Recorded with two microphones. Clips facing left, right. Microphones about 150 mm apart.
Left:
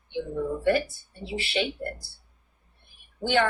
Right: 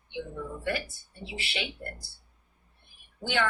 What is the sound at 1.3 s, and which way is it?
Speech, 40° left (ahead or behind).